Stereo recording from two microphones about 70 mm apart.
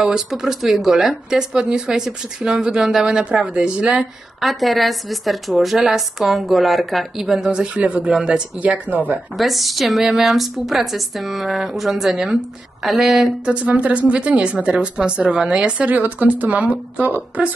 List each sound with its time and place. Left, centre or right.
0.0 s speech: centre
4.4 s a woman's voice: centre; by 9.0 s right
9.4 s a woman's voice: centre
13.5 s speech: centre